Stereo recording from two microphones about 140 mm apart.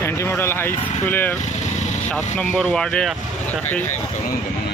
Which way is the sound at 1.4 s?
60° left (ahead or behind).